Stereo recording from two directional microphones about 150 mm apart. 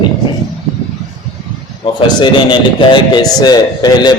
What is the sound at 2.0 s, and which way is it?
A man's voice, 30° left (ahead or behind).